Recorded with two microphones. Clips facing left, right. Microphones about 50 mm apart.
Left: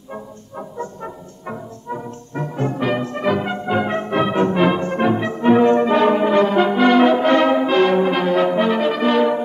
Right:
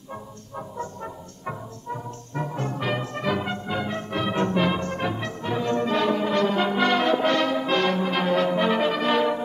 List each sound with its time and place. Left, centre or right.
0.6 s music: centre
3.5 s music: left
5.4 s brass instrument: left
6.6 s brass instrument: centre; by 7.6 s left
7.6 s brass instrument: centre